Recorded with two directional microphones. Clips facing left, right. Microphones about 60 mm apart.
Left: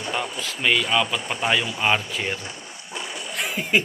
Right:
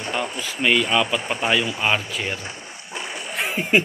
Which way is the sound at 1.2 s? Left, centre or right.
Right.